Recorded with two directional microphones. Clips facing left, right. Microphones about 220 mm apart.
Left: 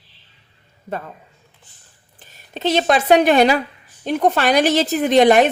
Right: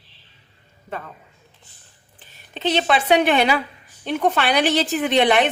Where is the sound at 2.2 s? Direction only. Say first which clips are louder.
Left 4 dB; 45° left (ahead or behind).